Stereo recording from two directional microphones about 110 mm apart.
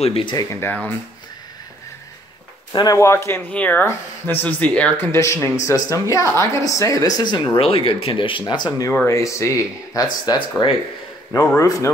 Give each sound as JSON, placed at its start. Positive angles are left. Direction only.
{"t": 0.0, "sound": "speech", "side_deg": 60}
{"t": 0.5, "sound": "speech", "side_deg": 20}
{"t": 2.7, "sound": "speech", "side_deg": 35}
{"t": 5.1, "sound": "a woman's voice", "side_deg": 25}
{"t": 8.5, "sound": "a woman's voice", "side_deg": 40}